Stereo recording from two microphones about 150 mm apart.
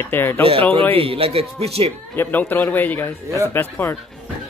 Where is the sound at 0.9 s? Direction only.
40° right (ahead or behind).